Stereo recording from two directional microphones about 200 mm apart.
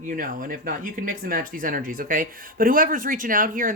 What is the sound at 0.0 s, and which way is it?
Speech, 45° right (ahead or behind).